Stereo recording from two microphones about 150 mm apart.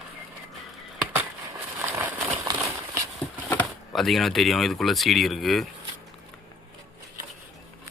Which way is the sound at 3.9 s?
Centre (ahead or behind).